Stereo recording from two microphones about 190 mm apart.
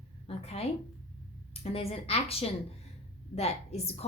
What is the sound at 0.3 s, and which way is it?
Speech, 30° left (ahead or behind).